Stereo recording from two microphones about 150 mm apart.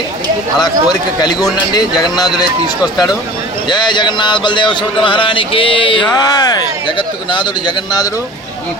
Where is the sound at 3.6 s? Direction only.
30° left (ahead or behind).